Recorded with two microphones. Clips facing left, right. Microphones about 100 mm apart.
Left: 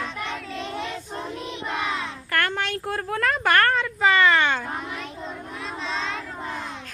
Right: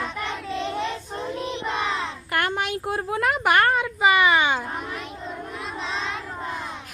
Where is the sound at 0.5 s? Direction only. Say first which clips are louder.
Right 4 dB; 20° right (ahead or behind).